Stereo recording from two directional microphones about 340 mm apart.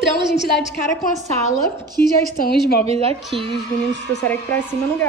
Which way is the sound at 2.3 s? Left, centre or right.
Left.